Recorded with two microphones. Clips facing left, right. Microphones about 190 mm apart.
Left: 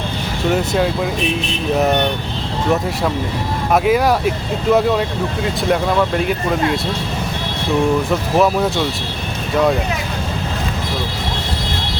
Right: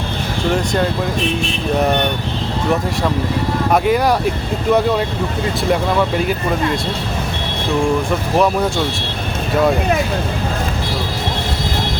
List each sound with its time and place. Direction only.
0.5 s speech: 5° left (ahead or behind)
3.7 s speech: centre (ahead or behind)
8.4 s speech: centre (ahead or behind)